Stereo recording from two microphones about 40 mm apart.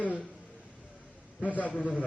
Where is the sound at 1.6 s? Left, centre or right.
Left.